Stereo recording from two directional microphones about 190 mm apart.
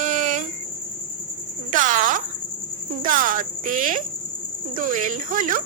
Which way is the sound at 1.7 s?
45° right (ahead or behind).